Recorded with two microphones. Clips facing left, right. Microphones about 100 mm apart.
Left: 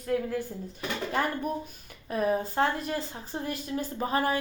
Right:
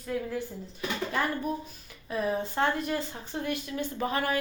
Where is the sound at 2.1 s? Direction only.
45° left (ahead or behind).